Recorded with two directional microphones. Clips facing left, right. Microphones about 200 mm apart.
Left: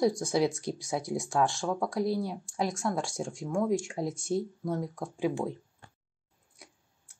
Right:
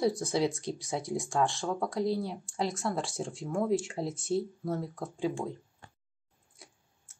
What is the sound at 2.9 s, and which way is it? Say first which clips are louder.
Speech: left 1 dB; 10° left (ahead or behind).